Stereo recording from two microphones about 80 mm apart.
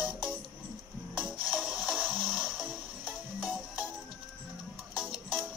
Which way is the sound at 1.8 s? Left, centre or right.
Centre.